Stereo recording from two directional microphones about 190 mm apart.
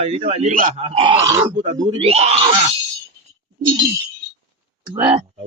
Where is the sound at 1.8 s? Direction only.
30° right (ahead or behind).